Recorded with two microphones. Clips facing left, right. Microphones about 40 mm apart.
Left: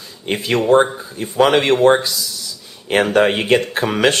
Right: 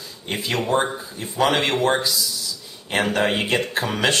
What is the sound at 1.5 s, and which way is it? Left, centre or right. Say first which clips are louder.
Speech: left 8 dB; left.